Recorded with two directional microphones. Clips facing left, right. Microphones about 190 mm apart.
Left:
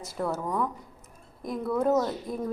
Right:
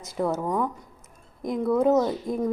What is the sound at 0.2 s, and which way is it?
A woman's voice, 20° right (ahead or behind).